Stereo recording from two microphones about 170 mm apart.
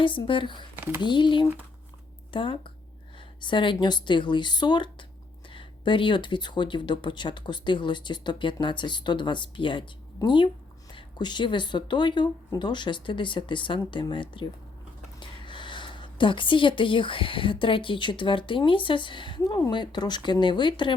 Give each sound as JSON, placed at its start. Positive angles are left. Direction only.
{"t": 0.0, "sound": "a woman's voice", "side_deg": 30}